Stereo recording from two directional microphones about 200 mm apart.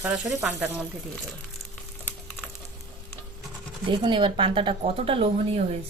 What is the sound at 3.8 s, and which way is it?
Speech, 25° right (ahead or behind).